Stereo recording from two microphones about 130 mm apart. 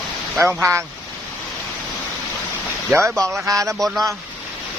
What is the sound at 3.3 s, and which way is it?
Speech, 25° right (ahead or behind).